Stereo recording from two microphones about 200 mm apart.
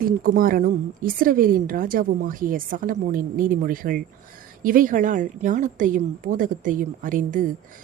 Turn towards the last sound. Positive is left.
turn(degrees=-40)  # may be behind; listen again after turning